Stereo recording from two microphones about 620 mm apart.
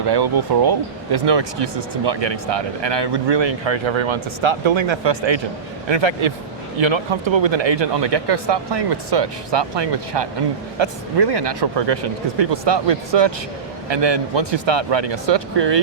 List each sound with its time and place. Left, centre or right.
0.1 s speech: right